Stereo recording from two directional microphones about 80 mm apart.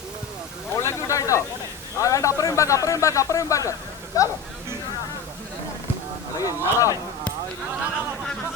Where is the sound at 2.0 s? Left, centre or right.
Left.